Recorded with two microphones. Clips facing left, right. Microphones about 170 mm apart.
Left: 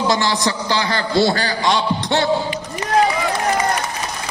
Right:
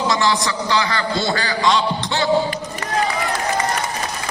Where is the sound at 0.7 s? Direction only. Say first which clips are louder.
Even; 40° left (ahead or behind).